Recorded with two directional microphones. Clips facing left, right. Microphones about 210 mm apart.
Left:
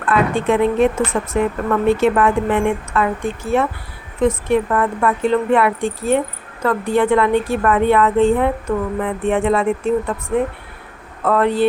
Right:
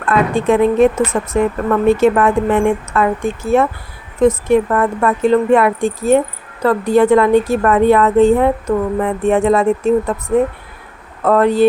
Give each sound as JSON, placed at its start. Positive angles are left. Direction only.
{"t": 0.0, "sound": "a woman's voice", "side_deg": -40}